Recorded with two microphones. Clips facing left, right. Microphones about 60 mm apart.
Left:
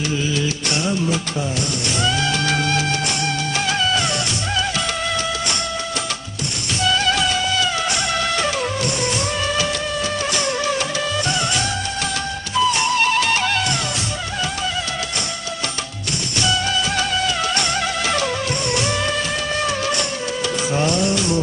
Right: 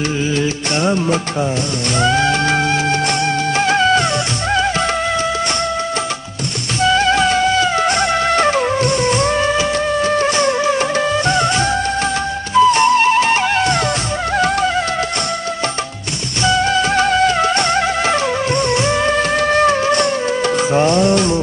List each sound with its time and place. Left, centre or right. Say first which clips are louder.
0.4 s music: right 5 dB; right
6.8 s music: right 6 dB; right
16.4 s music: right 7 dB; right
19.4 s music: right 8 dB; right